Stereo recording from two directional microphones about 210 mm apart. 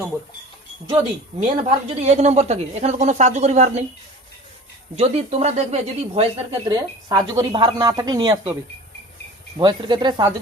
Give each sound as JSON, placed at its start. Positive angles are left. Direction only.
{"t": 1.4, "sound": "speech", "side_deg": -30}
{"t": 4.9, "sound": "speech", "side_deg": -30}
{"t": 6.7, "sound": "speech", "side_deg": -20}
{"t": 9.6, "sound": "speech", "side_deg": -20}